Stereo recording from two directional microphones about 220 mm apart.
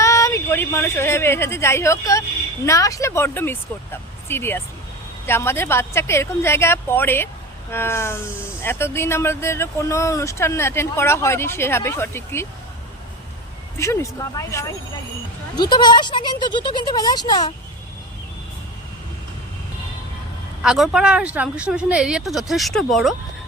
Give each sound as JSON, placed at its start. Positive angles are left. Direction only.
{"t": 0.0, "sound": "a woman's voice", "side_deg": 15}
{"t": 13.7, "sound": "speech", "side_deg": 15}
{"t": 20.6, "sound": "speech", "side_deg": 0}